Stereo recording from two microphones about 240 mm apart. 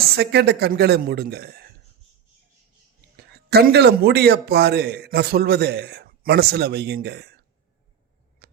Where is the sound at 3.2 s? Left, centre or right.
Right.